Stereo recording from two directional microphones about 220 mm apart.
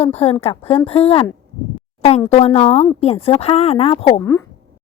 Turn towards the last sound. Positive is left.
turn(degrees=25)  # may be behind; listen again after turning